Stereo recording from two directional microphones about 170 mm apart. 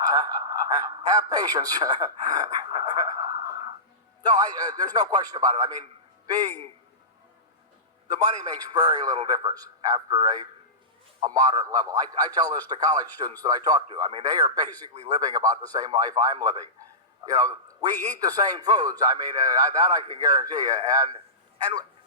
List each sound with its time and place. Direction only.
0.0 s a sound: 20° right (ahead or behind)
4.2 s a man's voice: 20° right (ahead or behind)
8.7 s a man's voice: 25° right (ahead or behind)